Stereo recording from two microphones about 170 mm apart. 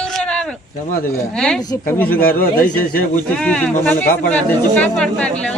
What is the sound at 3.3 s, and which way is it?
Speech, 10° left (ahead or behind).